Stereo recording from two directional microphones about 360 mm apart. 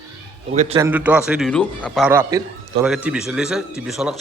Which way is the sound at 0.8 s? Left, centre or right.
Centre.